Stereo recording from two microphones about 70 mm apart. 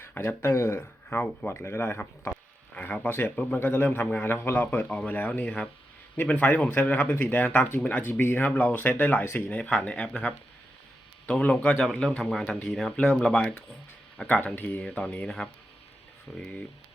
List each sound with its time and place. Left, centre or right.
0.0 s speech: left
2.3 s a sound: left
3.3 s speech: left
9.5 s speech: centre
14.3 s speech: left